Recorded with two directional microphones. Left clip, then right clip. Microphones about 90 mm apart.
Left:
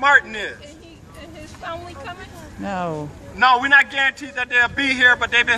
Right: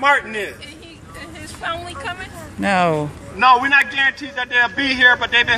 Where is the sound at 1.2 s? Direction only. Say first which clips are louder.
Right 6 dB; 5° right (ahead or behind).